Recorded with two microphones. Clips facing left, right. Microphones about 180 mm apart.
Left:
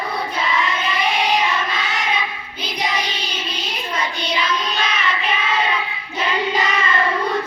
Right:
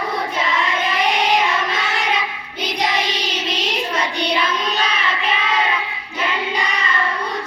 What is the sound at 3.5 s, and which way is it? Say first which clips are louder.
Child singing: right 4 dB; 70° right (ahead or behind).